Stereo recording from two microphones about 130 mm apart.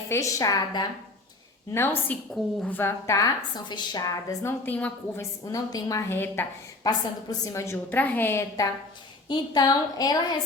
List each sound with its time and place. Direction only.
0.1 s a woman's voice: 25° left (ahead or behind)
1.7 s a woman's voice: 15° left (ahead or behind)
2.3 s a woman's voice: 5° left (ahead or behind)
2.7 s a woman's voice: 20° left (ahead or behind)
5.5 s a woman's voice: 25° left (ahead or behind)
6.8 s a woman's voice: 30° left (ahead or behind)
9.3 s a woman's voice: 35° left (ahead or behind)